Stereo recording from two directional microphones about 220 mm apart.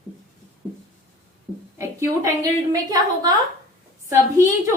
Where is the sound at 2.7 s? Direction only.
15° right (ahead or behind).